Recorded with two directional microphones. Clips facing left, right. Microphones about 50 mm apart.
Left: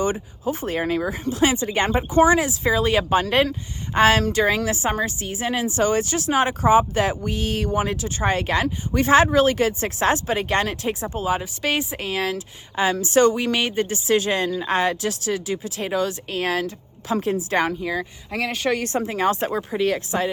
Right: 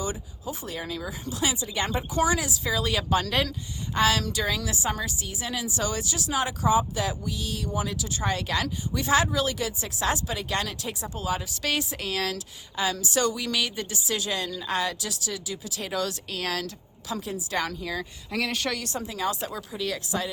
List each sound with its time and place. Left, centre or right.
0.0 s a woman's voice: left
12.7 s a woman's voice: left
17.2 s a woman's voice: left; by 18.5 s centre
18.7 s a woman's voice: left